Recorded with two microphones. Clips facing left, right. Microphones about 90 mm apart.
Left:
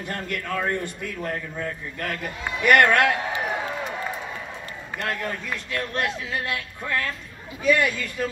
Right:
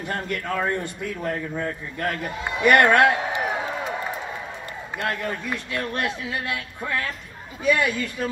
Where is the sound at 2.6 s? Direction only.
20° right (ahead or behind).